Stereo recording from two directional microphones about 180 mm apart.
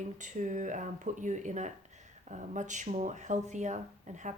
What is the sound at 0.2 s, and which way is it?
A woman's voice, 45° right (ahead or behind).